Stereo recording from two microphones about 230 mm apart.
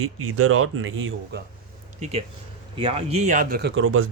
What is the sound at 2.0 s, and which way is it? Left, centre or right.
Speech, right.